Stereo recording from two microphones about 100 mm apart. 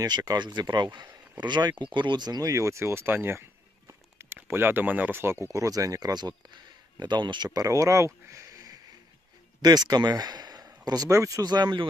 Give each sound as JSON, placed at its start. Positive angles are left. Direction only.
{"t": 0.0, "sound": "speech", "side_deg": -40}